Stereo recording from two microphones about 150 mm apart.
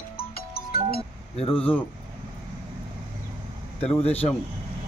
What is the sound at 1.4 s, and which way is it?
Speech, 40° left (ahead or behind).